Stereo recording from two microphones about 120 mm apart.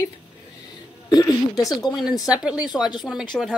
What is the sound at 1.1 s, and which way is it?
Speech, 35° left (ahead or behind).